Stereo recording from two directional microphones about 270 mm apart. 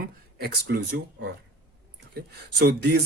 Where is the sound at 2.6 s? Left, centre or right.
Right.